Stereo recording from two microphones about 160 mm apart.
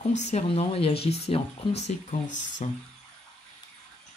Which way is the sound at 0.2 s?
45° left (ahead or behind).